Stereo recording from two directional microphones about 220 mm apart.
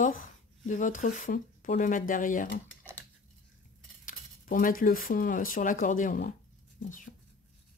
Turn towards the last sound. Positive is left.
turn(degrees=35)  # may be behind; listen again after turning